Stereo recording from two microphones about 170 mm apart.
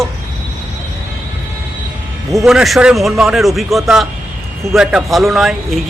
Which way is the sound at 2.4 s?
Centre (ahead or behind).